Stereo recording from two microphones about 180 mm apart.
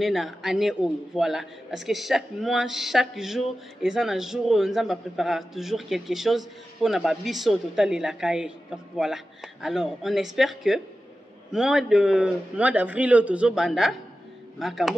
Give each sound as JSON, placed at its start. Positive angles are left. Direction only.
{"t": 0.0, "sound": "a man's voice", "side_deg": 0}